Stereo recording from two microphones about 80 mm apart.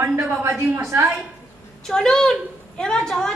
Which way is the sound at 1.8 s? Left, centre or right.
Centre.